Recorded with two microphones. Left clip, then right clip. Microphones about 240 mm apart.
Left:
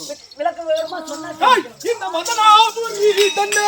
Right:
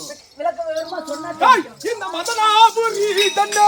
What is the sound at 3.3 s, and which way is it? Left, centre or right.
Music, centre.